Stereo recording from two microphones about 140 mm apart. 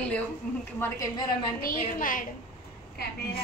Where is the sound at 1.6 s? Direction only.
75° left (ahead or behind).